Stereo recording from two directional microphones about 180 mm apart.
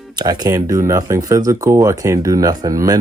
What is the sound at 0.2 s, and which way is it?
Speech, 20° right (ahead or behind).